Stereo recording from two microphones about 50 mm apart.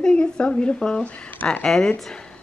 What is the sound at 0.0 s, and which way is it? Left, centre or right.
Speech, centre.